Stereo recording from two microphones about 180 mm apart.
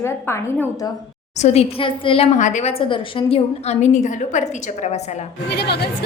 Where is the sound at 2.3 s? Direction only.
40° left (ahead or behind).